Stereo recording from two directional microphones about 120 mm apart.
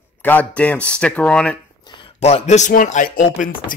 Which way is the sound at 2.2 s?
70° left (ahead or behind).